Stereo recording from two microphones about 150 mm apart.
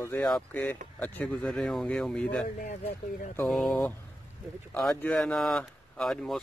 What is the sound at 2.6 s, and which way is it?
Speech, 55° left (ahead or behind).